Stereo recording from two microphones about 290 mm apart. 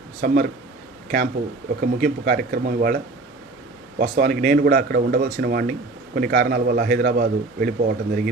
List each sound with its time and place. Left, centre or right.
0.2 s speech: right
1.8 s a man's voice: right